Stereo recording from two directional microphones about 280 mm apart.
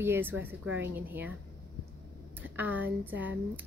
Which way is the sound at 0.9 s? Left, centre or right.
Centre.